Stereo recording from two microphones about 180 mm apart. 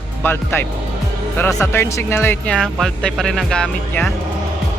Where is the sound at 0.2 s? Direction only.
10° left (ahead or behind).